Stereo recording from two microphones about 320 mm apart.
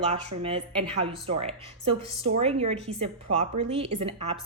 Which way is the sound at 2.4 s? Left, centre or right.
Centre.